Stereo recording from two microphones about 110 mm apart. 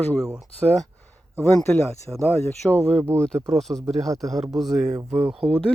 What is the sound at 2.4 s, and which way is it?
Speech, 15° left (ahead or behind).